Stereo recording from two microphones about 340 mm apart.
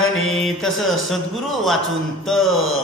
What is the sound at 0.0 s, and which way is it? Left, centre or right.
Mantra, left.